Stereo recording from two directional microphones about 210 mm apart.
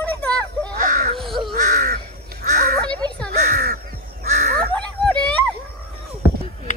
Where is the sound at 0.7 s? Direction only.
40° right (ahead or behind).